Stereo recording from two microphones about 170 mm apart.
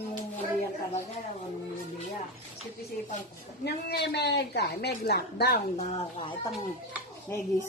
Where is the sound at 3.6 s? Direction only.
80° left.